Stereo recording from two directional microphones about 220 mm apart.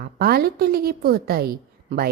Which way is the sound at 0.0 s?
45° right (ahead or behind).